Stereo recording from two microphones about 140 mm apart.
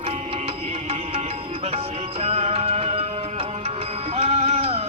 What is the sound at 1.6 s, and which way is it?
Music, 45° right (ahead or behind).